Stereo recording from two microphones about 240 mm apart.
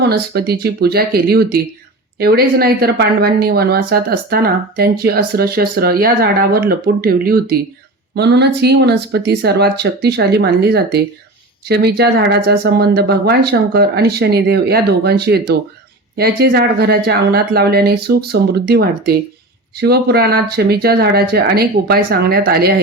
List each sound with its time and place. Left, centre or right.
0.0 s speech: right